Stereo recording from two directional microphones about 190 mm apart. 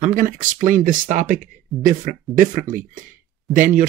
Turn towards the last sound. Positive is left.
turn(degrees=-45)  # may be behind; listen again after turning